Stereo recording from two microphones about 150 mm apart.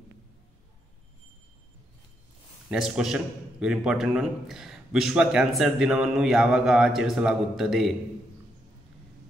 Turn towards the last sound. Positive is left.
turn(degrees=-5)  # may be behind; listen again after turning